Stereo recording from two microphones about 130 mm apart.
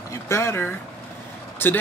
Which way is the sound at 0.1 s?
20° left (ahead or behind).